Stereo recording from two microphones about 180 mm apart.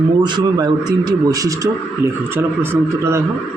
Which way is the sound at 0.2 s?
25° right (ahead or behind).